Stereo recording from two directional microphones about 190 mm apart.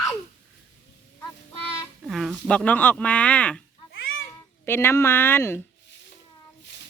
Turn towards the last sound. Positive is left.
turn(degrees=10)  # may be behind; listen again after turning